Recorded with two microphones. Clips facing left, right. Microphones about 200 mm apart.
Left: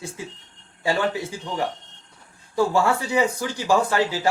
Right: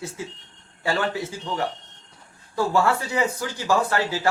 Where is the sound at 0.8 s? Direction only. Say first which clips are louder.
Left 2 dB; 15° left (ahead or behind).